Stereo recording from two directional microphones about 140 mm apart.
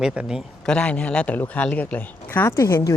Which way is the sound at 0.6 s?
5° left (ahead or behind).